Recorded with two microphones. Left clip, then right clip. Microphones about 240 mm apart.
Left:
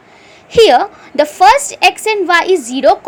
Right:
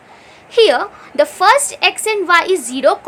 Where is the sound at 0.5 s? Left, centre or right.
Centre.